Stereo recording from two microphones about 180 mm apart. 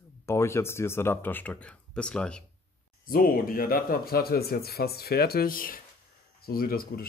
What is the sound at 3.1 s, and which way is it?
Speech, 50° left (ahead or behind).